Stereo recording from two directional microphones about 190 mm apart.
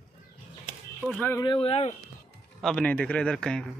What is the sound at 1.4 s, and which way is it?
Speech, 25° left (ahead or behind).